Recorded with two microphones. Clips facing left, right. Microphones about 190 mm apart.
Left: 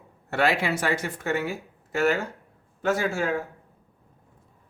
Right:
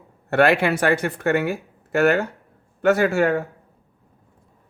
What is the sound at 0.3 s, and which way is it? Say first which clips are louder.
Speech: right 7 dB; 60° right (ahead or behind).